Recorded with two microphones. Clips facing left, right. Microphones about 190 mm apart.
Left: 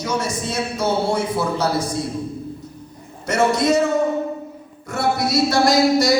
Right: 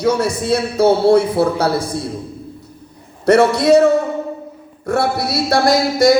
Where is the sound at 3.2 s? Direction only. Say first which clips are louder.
Right 6 dB; 65° right (ahead or behind).